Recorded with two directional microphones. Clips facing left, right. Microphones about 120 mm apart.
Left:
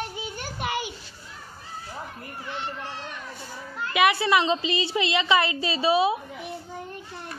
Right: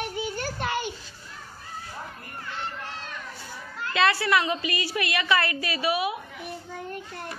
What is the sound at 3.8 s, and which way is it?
A woman's voice, 15° left (ahead or behind).